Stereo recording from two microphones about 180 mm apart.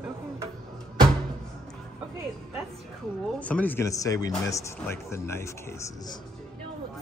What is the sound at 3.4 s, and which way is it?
Speech, 10° left (ahead or behind).